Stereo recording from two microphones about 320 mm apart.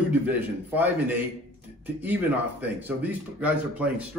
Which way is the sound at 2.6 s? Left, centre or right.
Centre.